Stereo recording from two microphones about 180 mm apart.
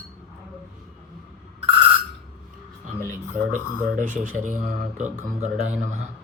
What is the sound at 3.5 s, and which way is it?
A man's voice, 45° right (ahead or behind).